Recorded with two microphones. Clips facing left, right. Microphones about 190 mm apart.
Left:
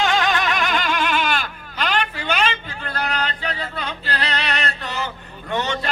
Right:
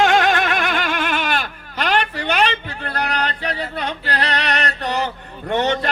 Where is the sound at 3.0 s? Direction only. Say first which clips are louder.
Right 2 dB; 60° right (ahead or behind).